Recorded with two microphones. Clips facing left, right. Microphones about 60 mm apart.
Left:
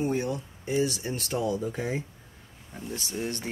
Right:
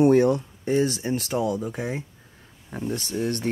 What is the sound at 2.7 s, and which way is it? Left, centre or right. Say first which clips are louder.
Speech: right 7 dB; right.